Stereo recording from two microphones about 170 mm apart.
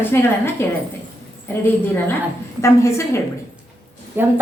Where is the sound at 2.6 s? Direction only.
15° left (ahead or behind).